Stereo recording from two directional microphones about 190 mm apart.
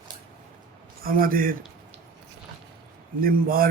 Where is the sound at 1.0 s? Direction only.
50° right (ahead or behind).